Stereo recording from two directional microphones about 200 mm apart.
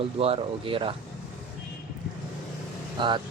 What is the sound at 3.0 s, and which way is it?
Speech, 25° right (ahead or behind).